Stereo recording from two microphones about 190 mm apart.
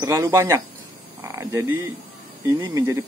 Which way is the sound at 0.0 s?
15° right (ahead or behind).